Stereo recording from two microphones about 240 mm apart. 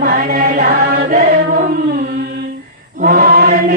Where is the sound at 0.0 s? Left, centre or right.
Right.